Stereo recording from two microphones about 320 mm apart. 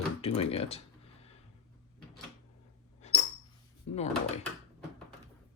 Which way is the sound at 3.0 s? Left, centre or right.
Left.